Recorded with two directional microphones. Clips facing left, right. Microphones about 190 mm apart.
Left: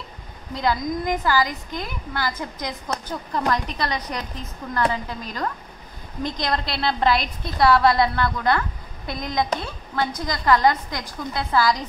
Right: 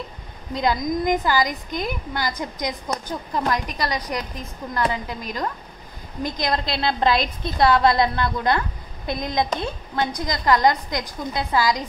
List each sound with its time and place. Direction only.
0.6 s a woman's voice: 15° right (ahead or behind)